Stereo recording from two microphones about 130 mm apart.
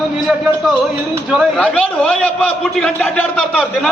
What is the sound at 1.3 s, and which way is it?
Speech, centre (ahead or behind).